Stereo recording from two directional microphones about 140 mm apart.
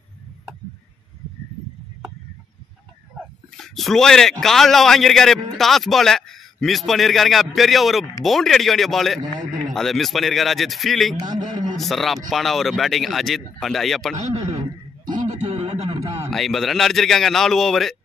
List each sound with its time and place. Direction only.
3.5 s a man's voice: centre (ahead or behind)
11.1 s a man's voice: 30° right (ahead or behind)
11.7 s a man's voice: centre (ahead or behind)
15.2 s a sound: 50° right (ahead or behind)
15.9 s a sound: 25° right (ahead or behind)
16.3 s a man's voice: centre (ahead or behind)